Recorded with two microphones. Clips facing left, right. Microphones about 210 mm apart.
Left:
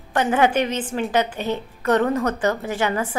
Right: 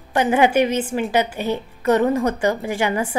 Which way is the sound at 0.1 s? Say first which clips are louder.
Right 2 dB; 10° right (ahead or behind).